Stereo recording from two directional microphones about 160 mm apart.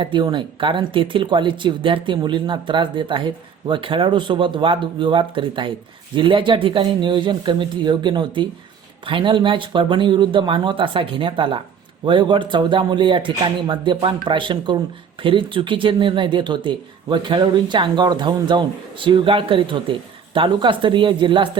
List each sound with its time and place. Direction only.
0.0 s speech: 30° right (ahead or behind)